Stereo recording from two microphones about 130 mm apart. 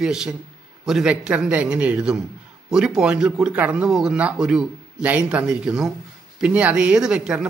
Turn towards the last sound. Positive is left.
turn(degrees=-5)  # may be behind; listen again after turning